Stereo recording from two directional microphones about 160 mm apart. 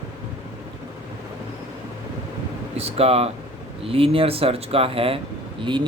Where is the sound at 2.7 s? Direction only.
40° right (ahead or behind).